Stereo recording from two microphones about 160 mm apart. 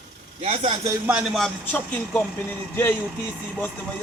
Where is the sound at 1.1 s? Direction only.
5° right (ahead or behind).